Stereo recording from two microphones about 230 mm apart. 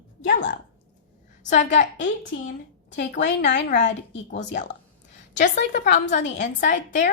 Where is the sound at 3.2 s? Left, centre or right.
Left.